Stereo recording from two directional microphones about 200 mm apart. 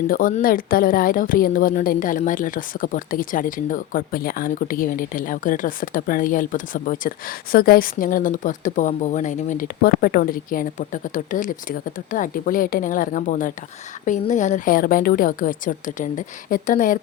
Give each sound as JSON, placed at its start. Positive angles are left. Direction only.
{"t": 0.1, "sound": "a woman's voice", "side_deg": 45}